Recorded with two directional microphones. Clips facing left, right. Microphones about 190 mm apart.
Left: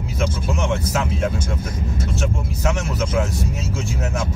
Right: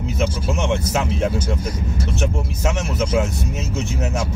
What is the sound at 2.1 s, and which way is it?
Speech, 20° right (ahead or behind).